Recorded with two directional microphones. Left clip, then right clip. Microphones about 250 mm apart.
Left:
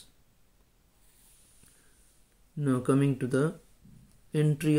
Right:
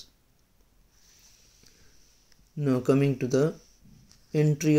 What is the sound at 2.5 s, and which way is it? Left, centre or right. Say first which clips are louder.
Speech: right 3 dB; centre.